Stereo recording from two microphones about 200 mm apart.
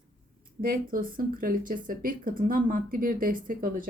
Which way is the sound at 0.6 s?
45° right (ahead or behind).